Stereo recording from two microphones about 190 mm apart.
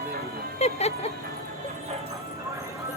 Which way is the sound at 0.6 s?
35° left (ahead or behind).